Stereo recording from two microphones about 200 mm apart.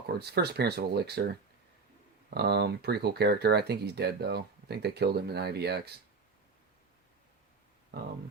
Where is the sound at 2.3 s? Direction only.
55° right (ahead or behind).